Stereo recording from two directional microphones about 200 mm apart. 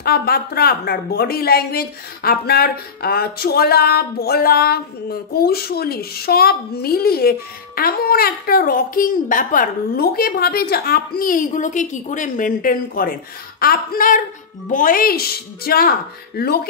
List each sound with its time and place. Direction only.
0.0 s a woman's voice: 50° left (ahead or behind)